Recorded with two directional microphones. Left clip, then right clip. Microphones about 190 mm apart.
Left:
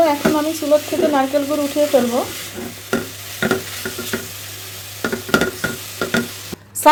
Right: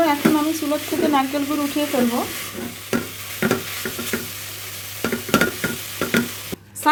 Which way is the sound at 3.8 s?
10° right (ahead or behind).